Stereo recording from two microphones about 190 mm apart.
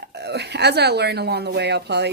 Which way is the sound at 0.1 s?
60° right (ahead or behind).